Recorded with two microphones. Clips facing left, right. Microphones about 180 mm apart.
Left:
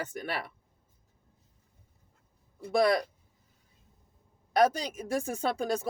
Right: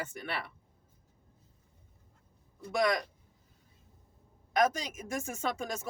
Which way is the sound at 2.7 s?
35° left (ahead or behind).